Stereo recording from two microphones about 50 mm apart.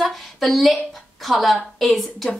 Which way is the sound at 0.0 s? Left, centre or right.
Centre.